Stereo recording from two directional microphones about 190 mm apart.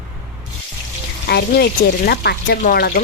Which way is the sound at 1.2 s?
55° left (ahead or behind).